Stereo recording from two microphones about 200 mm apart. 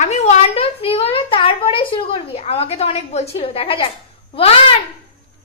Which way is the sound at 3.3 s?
30° left (ahead or behind).